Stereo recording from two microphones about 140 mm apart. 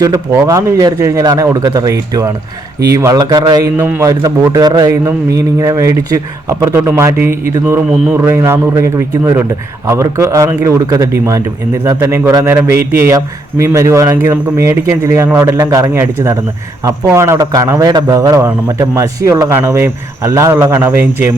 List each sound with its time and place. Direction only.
0.0 s a man's voice: 25° right (ahead or behind)